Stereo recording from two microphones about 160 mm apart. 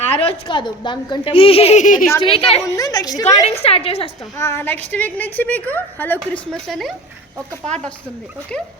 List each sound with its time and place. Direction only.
0.0 s a woman's voice: 35° left (ahead or behind); by 2.0 s 55° left (ahead or behind)
2.2 s a woman's voice: 35° left (ahead or behind)
2.7 s a woman's voice: 25° left (ahead or behind)
3.4 s a woman's voice: 40° left (ahead or behind)
4.4 s a woman's voice: 15° left (ahead or behind)
8.5 s a woman's voice: 5° left (ahead or behind)